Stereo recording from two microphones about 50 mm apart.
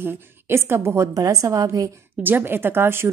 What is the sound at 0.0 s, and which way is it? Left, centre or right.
Speech, right.